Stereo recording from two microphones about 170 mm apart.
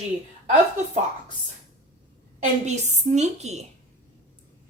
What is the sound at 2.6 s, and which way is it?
A woman's voice, 40° right (ahead or behind).